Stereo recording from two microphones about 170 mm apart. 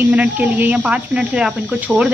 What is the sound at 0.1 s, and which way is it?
Speech, 10° right (ahead or behind).